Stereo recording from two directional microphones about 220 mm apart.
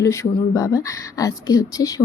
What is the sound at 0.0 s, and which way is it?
A woman's voice, 15° left (ahead or behind).